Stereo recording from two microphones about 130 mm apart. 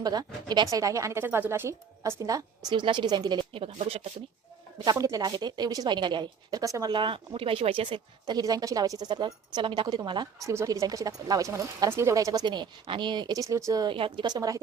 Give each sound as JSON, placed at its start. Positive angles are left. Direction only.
{"t": 0.0, "sound": "speech", "side_deg": -30}
{"t": 3.7, "sound": "speech", "side_deg": -55}
{"t": 4.9, "sound": "speech", "side_deg": -25}
{"t": 6.9, "sound": "speech", "side_deg": -40}
{"t": 13.9, "sound": "speech", "side_deg": -40}